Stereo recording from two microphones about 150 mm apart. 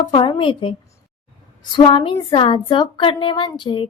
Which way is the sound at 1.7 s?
35° left (ahead or behind).